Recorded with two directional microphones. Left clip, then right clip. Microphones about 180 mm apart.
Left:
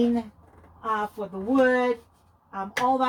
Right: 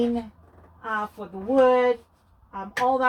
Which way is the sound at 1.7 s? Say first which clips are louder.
Right 3 dB; 30° left (ahead or behind).